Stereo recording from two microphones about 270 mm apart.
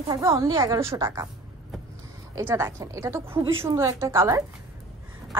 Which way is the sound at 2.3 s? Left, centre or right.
Centre.